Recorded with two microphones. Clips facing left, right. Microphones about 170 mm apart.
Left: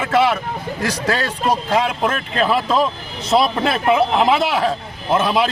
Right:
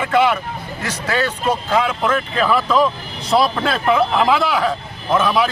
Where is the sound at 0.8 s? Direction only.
35° left (ahead or behind).